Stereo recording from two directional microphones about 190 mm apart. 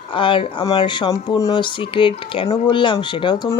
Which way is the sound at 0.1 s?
25° left (ahead or behind).